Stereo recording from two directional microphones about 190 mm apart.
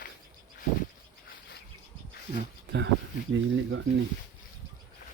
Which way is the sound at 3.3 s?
80° right.